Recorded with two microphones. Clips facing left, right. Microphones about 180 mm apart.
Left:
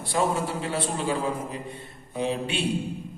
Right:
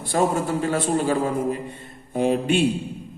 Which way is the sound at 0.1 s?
45° right (ahead or behind).